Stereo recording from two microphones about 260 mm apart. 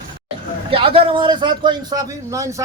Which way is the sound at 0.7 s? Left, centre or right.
Centre.